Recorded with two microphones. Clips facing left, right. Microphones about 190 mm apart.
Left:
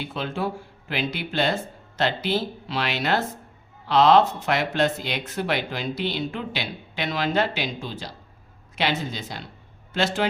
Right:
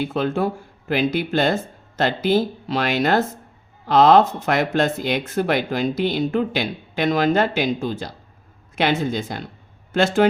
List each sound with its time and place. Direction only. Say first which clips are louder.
0.0 s speech: right 7 dB; 45° right (ahead or behind)